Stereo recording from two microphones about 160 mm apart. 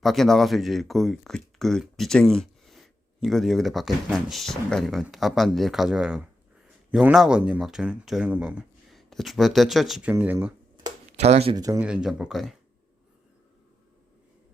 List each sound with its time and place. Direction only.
0.0 s speech: centre (ahead or behind)
11.2 s speech: 40° right (ahead or behind)
11.5 s speech: 20° right (ahead or behind)
11.8 s speech: 5° right (ahead or behind)